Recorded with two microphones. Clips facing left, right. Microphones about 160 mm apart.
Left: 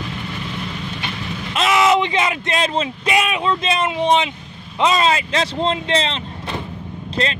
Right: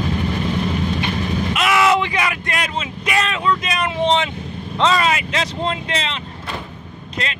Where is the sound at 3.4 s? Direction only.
25° left (ahead or behind).